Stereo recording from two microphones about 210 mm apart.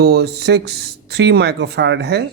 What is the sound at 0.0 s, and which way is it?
Speech, 50° right (ahead or behind).